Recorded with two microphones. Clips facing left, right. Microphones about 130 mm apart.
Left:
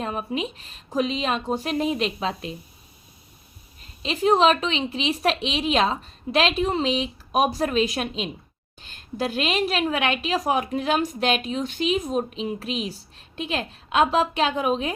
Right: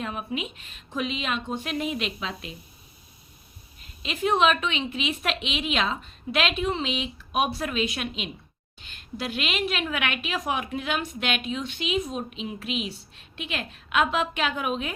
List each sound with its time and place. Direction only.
0.0 s a woman's voice: 35° left (ahead or behind)
4.0 s a woman's voice: 35° left (ahead or behind)